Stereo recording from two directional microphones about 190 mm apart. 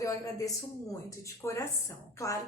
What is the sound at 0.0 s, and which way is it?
A woman's voice, 15° left (ahead or behind).